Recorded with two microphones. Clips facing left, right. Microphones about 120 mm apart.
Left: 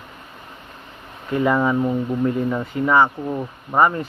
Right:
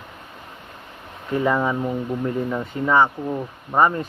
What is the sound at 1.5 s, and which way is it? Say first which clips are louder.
Speech: left 3 dB; 5° left (ahead or behind).